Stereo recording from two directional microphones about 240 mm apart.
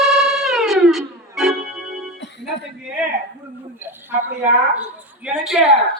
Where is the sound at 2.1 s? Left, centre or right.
Left.